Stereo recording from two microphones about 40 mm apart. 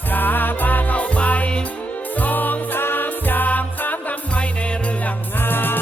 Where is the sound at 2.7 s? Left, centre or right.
Left.